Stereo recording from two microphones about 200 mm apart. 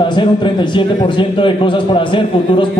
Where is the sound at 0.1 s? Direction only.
25° left (ahead or behind).